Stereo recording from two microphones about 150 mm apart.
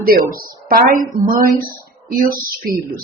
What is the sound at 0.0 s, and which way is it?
A woman's voice, 75° right (ahead or behind).